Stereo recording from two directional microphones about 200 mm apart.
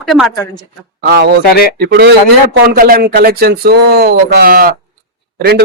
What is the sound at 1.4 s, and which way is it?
Speech, 50° left (ahead or behind).